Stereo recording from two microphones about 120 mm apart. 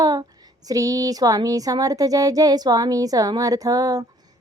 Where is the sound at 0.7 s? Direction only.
30° right (ahead or behind).